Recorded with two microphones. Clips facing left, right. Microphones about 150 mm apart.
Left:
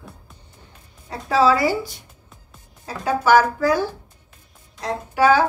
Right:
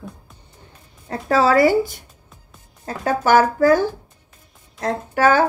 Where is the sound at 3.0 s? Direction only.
50° right (ahead or behind).